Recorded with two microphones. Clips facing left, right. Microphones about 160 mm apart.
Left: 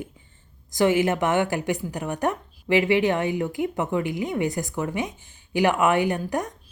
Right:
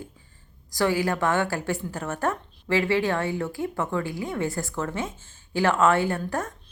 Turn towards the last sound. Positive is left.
turn(degrees=15)  # may be behind; listen again after turning